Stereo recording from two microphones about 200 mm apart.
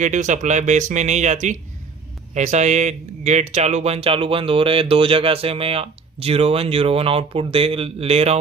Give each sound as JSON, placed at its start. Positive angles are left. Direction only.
{"t": 0.0, "sound": "speech", "side_deg": -35}